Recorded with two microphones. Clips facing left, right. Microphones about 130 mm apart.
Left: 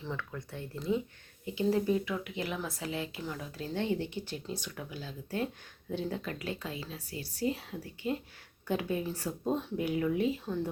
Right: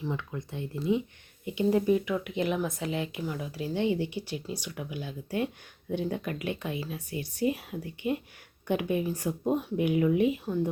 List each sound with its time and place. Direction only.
0.0 s speech: 15° right (ahead or behind)